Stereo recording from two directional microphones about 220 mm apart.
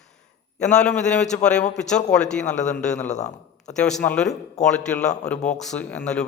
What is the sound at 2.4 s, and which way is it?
Speech, 35° left (ahead or behind).